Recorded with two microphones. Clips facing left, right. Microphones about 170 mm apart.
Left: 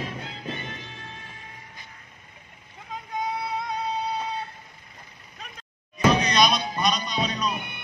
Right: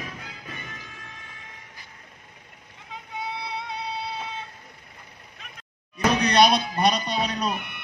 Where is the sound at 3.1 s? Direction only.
45° left (ahead or behind).